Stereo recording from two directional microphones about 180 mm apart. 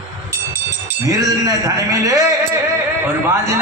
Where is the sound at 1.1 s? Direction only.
20° right (ahead or behind).